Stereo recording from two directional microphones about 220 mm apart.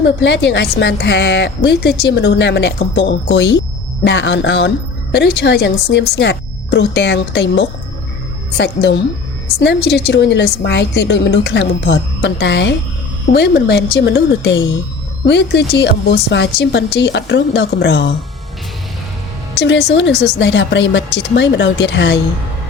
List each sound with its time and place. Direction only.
0.0 s speech: 50° left (ahead or behind)
19.5 s speech: 55° left (ahead or behind)